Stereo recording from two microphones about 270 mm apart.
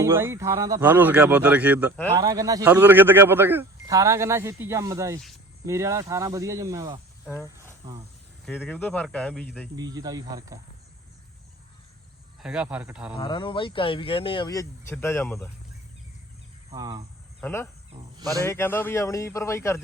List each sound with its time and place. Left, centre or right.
0.0 s speech: centre
7.3 s cricket: centre
8.4 s speech: centre
9.7 s speech: centre
12.4 s speech: centre
13.1 s speech: centre
16.6 s speech: centre
17.4 s insect: centre
18.2 s a man's voice: centre
18.4 s speech: centre